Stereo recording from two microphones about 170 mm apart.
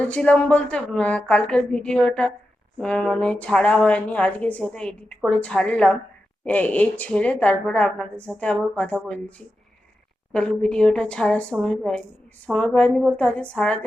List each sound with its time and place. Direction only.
0.0 s a woman's voice: 5° left (ahead or behind)
10.3 s a woman's voice: 5° left (ahead or behind)